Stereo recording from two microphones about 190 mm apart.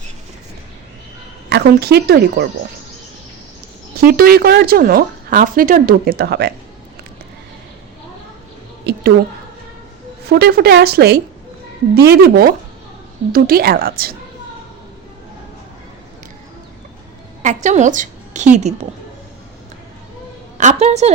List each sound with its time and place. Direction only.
1.5 s speech: 60° right (ahead or behind)
4.0 s speech: 50° right (ahead or behind)
8.9 s a sound: 60° right (ahead or behind)
10.2 s speech: 60° right (ahead or behind)
17.4 s a woman's voice: 40° right (ahead or behind)
20.6 s a woman's voice: 35° right (ahead or behind)